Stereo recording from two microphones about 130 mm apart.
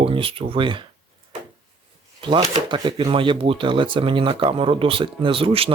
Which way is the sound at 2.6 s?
35° right (ahead or behind).